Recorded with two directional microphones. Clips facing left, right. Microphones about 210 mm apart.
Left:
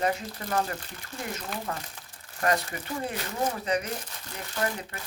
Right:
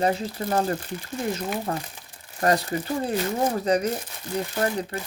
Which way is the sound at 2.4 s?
35° right (ahead or behind).